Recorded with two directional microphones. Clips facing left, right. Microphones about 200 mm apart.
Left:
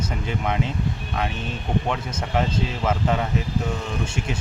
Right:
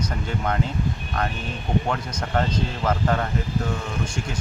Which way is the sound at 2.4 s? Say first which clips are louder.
Even; 5° left (ahead or behind).